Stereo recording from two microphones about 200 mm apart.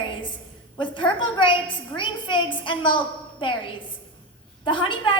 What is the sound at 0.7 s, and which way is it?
A woman's voice, 25° left (ahead or behind).